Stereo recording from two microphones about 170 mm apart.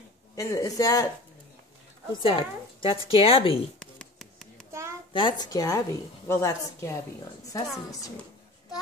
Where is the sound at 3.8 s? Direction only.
5° left (ahead or behind).